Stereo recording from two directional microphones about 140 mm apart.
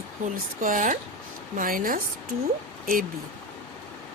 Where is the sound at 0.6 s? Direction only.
70° right (ahead or behind).